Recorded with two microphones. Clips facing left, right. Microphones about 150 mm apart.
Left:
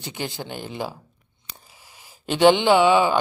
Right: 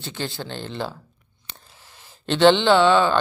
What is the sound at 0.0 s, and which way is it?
Speech, 15° left (ahead or behind).